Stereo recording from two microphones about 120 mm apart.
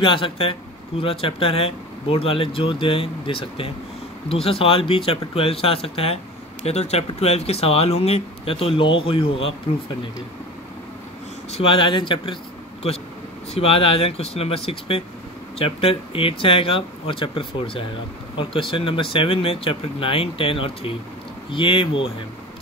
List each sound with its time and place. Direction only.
0.0 s speech: 45° left (ahead or behind)
11.5 s speech: 50° left (ahead or behind)
13.5 s speech: 55° left (ahead or behind)